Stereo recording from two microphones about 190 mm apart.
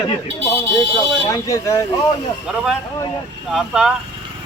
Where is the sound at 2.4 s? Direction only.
Centre (ahead or behind).